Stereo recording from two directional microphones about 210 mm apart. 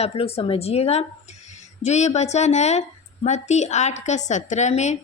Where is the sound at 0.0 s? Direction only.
30° left (ahead or behind).